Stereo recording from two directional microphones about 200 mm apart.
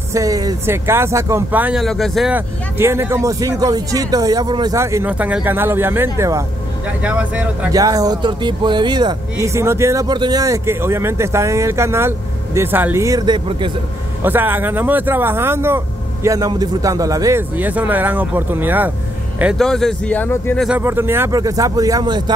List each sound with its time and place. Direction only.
0.1 s speech: 15° right (ahead or behind)
14.2 s speech: 10° right (ahead or behind)
19.4 s speech: centre (ahead or behind)
20.6 s speech: 10° right (ahead or behind)